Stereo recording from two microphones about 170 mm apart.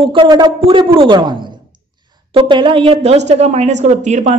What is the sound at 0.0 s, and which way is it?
A woman's voice, 30° right (ahead or behind).